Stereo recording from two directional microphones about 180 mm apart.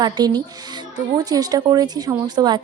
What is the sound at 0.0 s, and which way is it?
A woman's voice, 20° right (ahead or behind).